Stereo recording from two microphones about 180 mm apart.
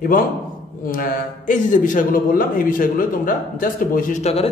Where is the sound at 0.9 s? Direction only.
50° left (ahead or behind).